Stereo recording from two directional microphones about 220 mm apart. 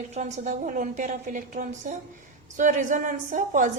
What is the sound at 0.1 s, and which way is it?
A woman's voice, 30° right (ahead or behind).